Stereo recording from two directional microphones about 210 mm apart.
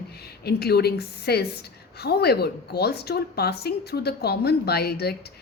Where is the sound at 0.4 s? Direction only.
50° left (ahead or behind).